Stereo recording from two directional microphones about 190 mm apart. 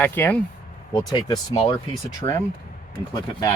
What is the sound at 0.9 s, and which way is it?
Speech, 20° left (ahead or behind).